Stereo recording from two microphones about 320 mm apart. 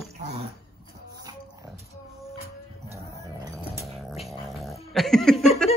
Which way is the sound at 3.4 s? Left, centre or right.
Centre.